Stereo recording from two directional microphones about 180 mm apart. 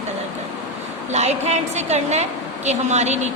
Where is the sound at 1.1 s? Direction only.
40° right (ahead or behind).